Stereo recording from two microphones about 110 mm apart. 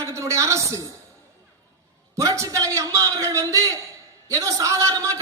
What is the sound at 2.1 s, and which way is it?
A man's voice, 25° right (ahead or behind).